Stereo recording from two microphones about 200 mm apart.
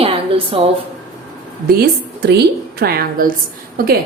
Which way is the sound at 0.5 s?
30° right (ahead or behind).